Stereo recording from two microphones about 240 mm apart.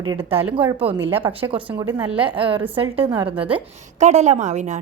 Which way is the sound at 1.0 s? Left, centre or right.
Centre.